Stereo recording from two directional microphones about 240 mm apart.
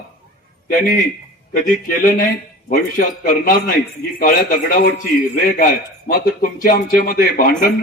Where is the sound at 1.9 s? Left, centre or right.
Left.